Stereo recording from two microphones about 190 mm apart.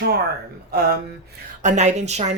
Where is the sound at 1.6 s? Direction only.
40° right (ahead or behind).